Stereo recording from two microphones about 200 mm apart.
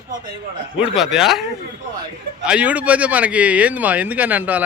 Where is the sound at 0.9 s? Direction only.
Centre (ahead or behind).